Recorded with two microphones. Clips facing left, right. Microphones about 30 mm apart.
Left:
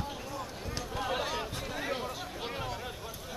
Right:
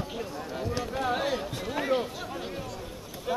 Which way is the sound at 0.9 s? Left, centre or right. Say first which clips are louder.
Right 3 dB; centre.